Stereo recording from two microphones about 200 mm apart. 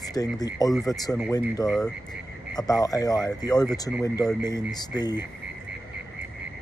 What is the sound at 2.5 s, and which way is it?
Speech, 20° left (ahead or behind).